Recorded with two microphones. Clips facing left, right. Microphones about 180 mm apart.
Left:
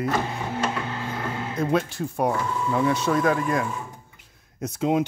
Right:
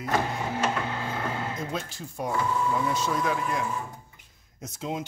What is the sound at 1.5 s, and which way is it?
Speech, 65° left (ahead or behind).